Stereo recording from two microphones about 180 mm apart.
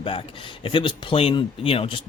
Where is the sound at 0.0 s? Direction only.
30° left (ahead or behind).